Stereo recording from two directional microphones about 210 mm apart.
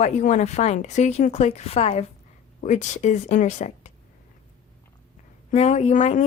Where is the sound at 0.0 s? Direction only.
35° left (ahead or behind).